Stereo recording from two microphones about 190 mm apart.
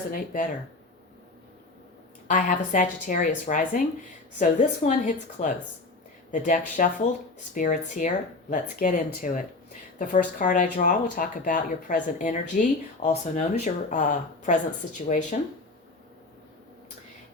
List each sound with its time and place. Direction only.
0.1 s speech: 45° left (ahead or behind)
2.2 s a woman's voice: 45° left (ahead or behind)